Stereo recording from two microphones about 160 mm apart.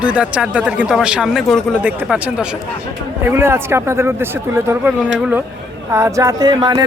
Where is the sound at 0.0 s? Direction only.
10° right (ahead or behind).